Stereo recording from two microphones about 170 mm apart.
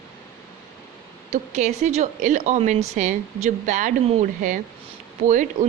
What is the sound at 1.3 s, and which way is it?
A woman's voice, 45° right (ahead or behind).